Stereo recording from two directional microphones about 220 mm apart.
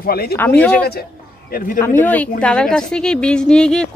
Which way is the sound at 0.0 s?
45° left (ahead or behind).